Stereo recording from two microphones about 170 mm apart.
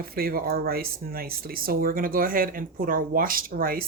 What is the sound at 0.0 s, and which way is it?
Speech, 60° right (ahead or behind).